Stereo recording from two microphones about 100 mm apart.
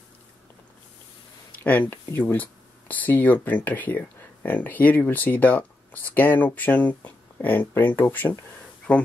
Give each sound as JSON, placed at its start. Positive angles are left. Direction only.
{"t": 1.6, "sound": "speech", "side_deg": 20}